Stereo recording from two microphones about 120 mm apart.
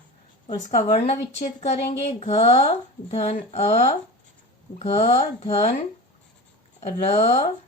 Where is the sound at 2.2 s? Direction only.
65° left (ahead or behind).